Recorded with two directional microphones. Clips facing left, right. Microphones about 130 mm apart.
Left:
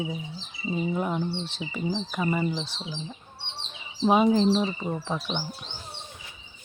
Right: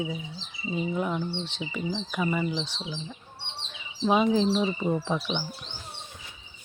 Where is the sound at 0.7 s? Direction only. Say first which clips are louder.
Left 1 dB; 5° left (ahead or behind).